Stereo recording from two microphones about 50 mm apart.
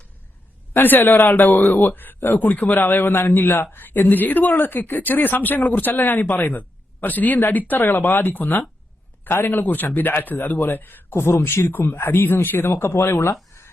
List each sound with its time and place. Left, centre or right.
0.7 s speech: left
11.1 s speech: left
11.7 s speech: left
12.7 s speech: left